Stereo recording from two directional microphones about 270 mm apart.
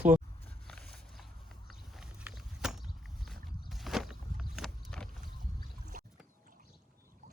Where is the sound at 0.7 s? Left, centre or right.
Centre.